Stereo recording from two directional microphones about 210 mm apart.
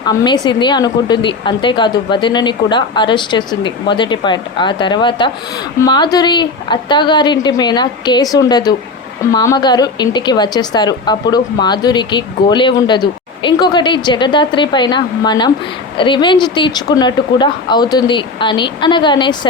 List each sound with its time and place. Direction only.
0.4 s speech: 20° left (ahead or behind)